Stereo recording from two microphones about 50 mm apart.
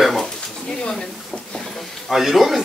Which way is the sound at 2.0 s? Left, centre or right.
Centre.